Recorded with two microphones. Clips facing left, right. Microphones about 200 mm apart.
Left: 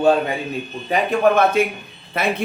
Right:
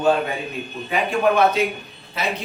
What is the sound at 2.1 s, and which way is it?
Speech, 55° left (ahead or behind).